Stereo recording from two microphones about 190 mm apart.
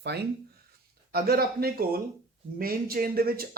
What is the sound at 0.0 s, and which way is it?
Speech, 60° right (ahead or behind).